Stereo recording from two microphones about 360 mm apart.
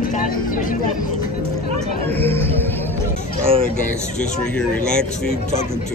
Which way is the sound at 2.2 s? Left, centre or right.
Centre.